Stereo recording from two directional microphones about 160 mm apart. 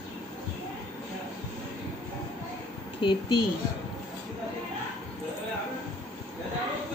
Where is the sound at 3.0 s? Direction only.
30° left (ahead or behind).